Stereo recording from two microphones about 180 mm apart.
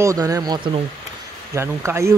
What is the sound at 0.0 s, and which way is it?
Speech, 20° right (ahead or behind).